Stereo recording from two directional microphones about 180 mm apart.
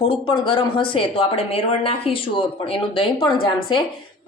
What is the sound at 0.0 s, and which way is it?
Speech, 30° left (ahead or behind).